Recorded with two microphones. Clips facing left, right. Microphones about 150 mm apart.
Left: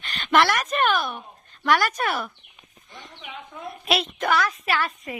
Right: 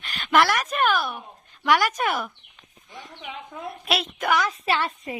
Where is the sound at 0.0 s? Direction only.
5° right (ahead or behind).